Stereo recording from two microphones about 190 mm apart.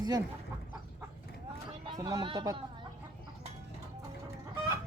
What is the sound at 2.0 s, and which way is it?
Speech, 20° right (ahead or behind).